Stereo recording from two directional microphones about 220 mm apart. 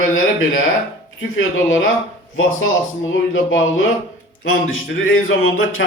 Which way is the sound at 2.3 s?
60° left (ahead or behind).